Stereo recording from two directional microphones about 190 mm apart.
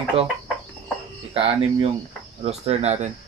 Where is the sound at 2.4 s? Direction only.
35° right (ahead or behind).